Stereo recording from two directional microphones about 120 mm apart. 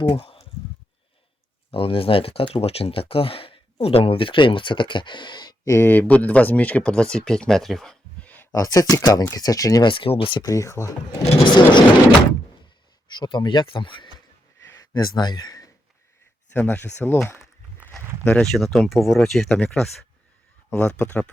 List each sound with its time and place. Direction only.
0.2 s a sound: 50° left (ahead or behind)
1.7 s speech: 50° left (ahead or behind)
5.6 s speech: 20° left (ahead or behind)
8.5 s speech: 30° left (ahead or behind)
9.8 s speech: 45° left (ahead or behind)
10.4 s speech: 25° left (ahead or behind)
11.4 s speech: 40° left (ahead or behind)
13.1 s speech: 40° left (ahead or behind)
14.7 s speech: 30° left (ahead or behind)
16.5 s speech: 15° left (ahead or behind)
18.2 s speech: 5° left (ahead or behind)